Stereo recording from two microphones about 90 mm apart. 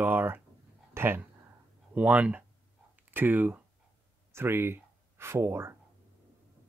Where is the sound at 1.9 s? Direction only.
15° right (ahead or behind).